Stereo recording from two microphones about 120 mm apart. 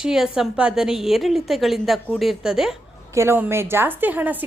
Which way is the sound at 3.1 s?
20° right (ahead or behind).